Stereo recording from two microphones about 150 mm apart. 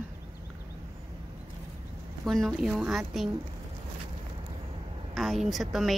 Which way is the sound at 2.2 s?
Centre (ahead or behind).